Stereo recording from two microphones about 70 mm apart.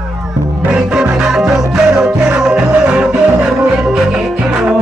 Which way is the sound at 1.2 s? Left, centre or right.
Centre.